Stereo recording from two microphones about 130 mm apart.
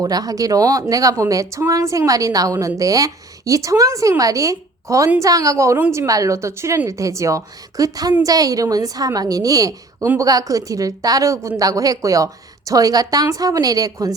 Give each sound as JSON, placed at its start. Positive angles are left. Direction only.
{"t": 0.0, "sound": "a woman's voice", "side_deg": -30}